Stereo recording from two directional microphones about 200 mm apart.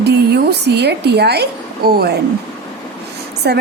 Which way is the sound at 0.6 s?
55° right (ahead or behind).